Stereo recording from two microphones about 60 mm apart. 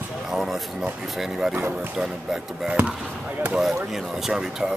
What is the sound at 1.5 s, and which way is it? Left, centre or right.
Speech, right.